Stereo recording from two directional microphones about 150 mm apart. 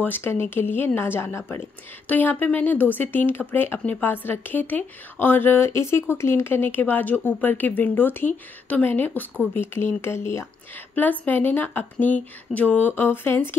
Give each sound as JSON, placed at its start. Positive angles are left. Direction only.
{"t": 0.0, "sound": "speech", "side_deg": 15}